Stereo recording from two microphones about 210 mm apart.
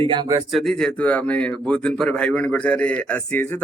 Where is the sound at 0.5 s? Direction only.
Centre (ahead or behind).